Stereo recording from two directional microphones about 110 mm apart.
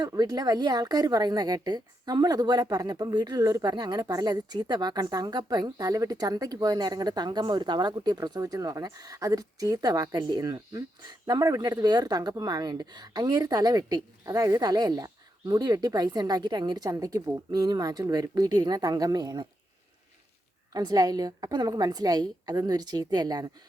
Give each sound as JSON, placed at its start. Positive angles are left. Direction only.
{"t": 0.0, "sound": "speech", "side_deg": -35}
{"t": 20.7, "sound": "speech", "side_deg": -35}